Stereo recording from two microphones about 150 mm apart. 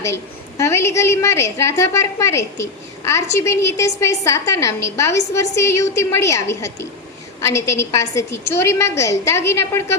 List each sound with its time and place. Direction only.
0.0 s a woman's voice: 20° left (ahead or behind)